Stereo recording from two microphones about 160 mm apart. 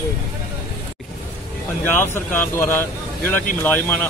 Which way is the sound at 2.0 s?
15° left (ahead or behind).